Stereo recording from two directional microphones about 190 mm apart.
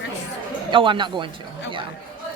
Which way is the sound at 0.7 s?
25° right (ahead or behind).